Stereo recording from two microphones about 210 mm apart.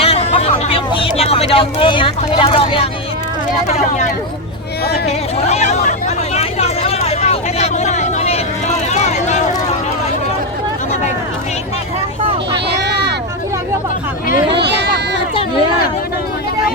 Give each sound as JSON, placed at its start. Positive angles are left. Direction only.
{"t": 0.0, "sound": "a sound", "side_deg": 30}
{"t": 3.7, "sound": "speech", "side_deg": 35}
{"t": 6.3, "sound": "vehicle", "side_deg": 30}
{"t": 12.7, "sound": "vehicle", "side_deg": -50}
{"t": 14.6, "sound": "run", "side_deg": -55}